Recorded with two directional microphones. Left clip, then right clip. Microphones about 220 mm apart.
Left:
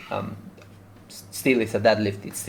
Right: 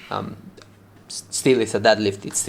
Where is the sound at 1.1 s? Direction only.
30° right (ahead or behind).